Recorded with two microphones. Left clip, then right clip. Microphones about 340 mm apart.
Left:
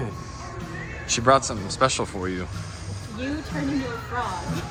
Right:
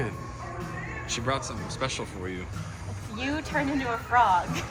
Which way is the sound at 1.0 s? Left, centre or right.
Centre.